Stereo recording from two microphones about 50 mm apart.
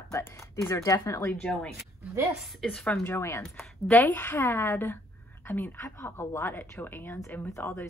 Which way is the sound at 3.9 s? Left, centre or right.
Left.